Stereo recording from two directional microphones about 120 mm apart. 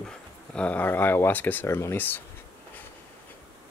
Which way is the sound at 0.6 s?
15° left (ahead or behind).